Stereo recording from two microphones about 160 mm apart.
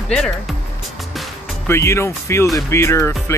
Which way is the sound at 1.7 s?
15° left (ahead or behind).